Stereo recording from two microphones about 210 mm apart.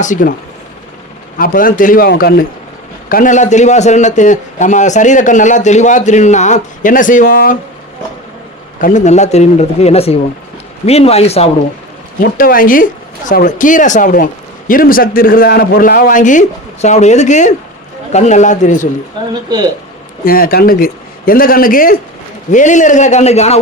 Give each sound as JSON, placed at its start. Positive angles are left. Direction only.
{"t": 0.0, "sound": "a man's voice", "side_deg": 40}
{"t": 1.4, "sound": "a man's voice", "side_deg": 40}
{"t": 8.8, "sound": "a man's voice", "side_deg": 35}
{"t": 12.2, "sound": "a man's voice", "side_deg": 45}
{"t": 19.3, "sound": "speech", "side_deg": -20}
{"t": 20.2, "sound": "a man's voice", "side_deg": 45}